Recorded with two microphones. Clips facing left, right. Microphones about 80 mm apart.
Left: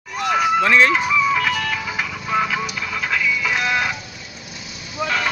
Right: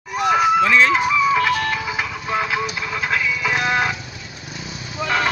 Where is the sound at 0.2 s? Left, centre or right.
Right.